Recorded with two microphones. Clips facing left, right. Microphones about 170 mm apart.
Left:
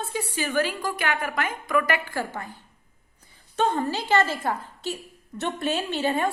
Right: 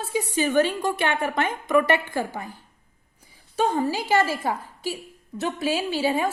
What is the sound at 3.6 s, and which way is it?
A woman's voice, 10° right (ahead or behind).